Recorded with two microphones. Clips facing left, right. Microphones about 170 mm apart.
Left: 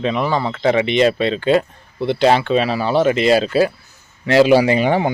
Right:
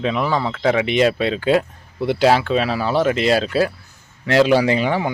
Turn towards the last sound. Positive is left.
turn(degrees=25)  # may be behind; listen again after turning